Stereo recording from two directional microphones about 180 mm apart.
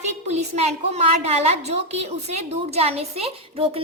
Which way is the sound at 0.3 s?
35° right (ahead or behind).